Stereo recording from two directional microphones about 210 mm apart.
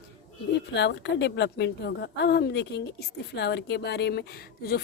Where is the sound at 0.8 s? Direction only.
55° left (ahead or behind).